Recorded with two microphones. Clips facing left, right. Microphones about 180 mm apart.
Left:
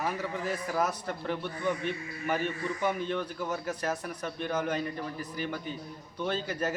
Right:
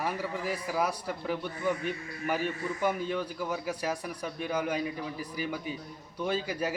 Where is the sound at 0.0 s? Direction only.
10° right (ahead or behind).